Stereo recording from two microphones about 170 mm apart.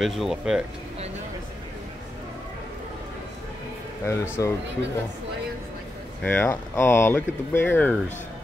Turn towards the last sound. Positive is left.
turn(degrees=10)  # may be behind; listen again after turning